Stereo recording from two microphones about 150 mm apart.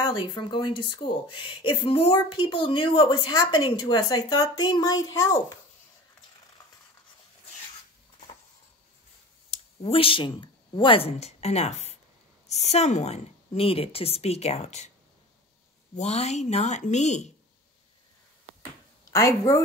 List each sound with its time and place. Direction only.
0.0 s speech: 30° left (ahead or behind)
9.5 s a woman's voice: 40° left (ahead or behind)
16.0 s a woman's voice: 50° left (ahead or behind)
19.0 s speech: 20° left (ahead or behind)